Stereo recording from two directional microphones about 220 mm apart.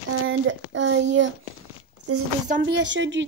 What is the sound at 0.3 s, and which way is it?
Speech, 60° right (ahead or behind).